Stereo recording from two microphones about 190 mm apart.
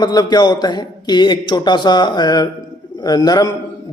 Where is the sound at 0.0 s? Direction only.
20° left (ahead or behind).